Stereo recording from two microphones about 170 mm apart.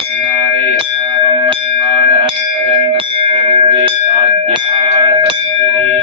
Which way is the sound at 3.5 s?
30° right (ahead or behind).